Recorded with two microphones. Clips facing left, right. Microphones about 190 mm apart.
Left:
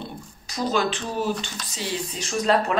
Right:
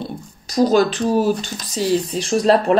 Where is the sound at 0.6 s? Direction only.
40° right (ahead or behind).